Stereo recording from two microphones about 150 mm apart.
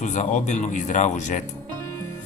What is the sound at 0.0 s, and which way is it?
A man's voice, 50° left (ahead or behind).